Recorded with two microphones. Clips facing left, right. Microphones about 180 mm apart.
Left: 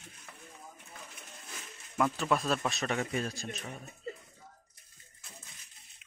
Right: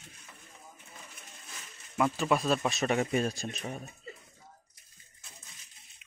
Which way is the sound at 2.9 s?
20° right (ahead or behind).